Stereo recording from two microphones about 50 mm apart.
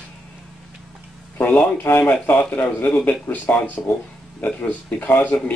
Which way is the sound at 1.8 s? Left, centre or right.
Left.